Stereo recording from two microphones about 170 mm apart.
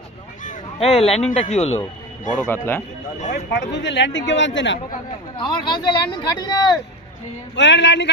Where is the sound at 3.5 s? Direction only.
90° left.